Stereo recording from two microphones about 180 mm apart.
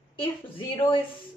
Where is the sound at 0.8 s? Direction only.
25° left (ahead or behind).